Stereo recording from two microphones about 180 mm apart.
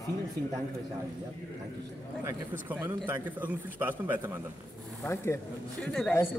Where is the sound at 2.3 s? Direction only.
10° right (ahead or behind).